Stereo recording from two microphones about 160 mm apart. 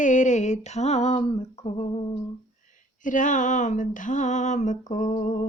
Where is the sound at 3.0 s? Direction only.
55° left (ahead or behind).